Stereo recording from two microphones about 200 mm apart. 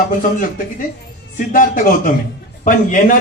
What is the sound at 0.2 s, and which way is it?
A man's voice, 40° left (ahead or behind).